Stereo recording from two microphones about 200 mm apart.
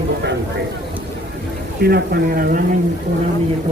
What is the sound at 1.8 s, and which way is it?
Speech, 50° right (ahead or behind).